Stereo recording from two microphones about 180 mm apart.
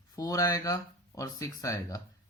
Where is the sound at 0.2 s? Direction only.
20° left (ahead or behind).